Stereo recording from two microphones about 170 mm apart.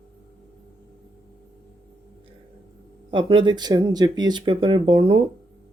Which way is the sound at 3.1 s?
30° right (ahead or behind).